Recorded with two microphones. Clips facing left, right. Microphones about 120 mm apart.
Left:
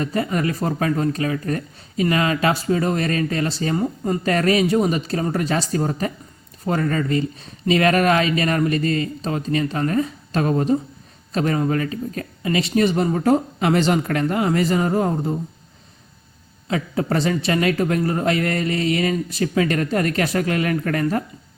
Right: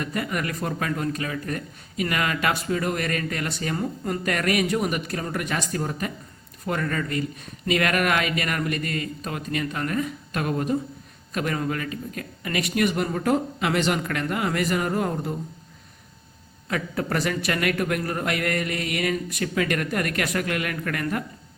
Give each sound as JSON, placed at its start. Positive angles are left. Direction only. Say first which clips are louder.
{"t": 0.0, "sound": "a man's voice", "louder": "left 6 dB", "side_deg": 30}
{"t": 16.6, "sound": "a man's voice", "louder": "left 5 dB", "side_deg": 25}